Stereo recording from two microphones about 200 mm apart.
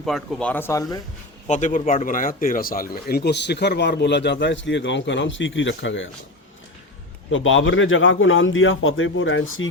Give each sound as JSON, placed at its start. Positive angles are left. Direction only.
{"t": 0.0, "sound": "speech", "side_deg": 5}
{"t": 1.5, "sound": "speech", "side_deg": 35}
{"t": 7.3, "sound": "a man's voice", "side_deg": 75}